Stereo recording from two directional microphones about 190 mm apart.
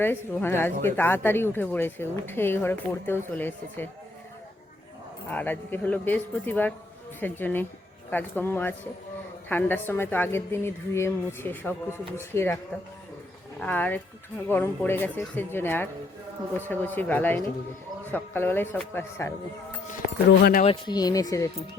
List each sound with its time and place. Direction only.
0.0 s speech: 10° left (ahead or behind)
5.3 s speech: 10° left (ahead or behind)
13.6 s speech: 10° left (ahead or behind)
20.4 s speech: 50° left (ahead or behind)
20.7 s speech: 20° left (ahead or behind)